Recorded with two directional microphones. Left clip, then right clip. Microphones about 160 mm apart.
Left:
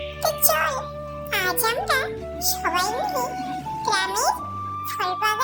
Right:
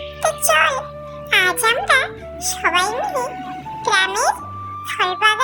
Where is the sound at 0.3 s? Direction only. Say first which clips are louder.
Right 7 dB; 20° right (ahead or behind).